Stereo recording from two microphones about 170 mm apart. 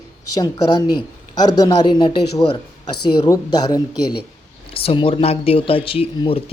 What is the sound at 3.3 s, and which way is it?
Speech, 25° left (ahead or behind).